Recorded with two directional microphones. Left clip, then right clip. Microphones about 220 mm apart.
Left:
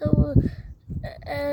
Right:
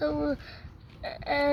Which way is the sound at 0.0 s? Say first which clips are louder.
Left 3 dB; 30° left (ahead or behind).